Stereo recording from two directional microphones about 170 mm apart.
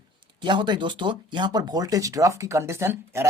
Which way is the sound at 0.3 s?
25° right (ahead or behind).